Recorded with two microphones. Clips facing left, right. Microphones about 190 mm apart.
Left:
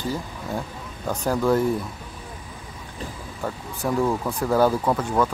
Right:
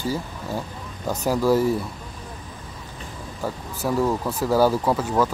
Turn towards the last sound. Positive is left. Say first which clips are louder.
# right 1 dB
turn(degrees=-5)  # may be behind; listen again after turning